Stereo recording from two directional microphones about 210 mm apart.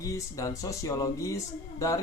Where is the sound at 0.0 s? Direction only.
15° left (ahead or behind).